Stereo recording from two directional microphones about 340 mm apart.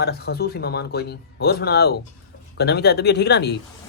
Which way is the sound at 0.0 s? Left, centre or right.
Left.